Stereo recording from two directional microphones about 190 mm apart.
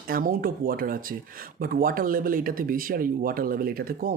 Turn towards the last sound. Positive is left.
turn(degrees=-50)  # may be behind; listen again after turning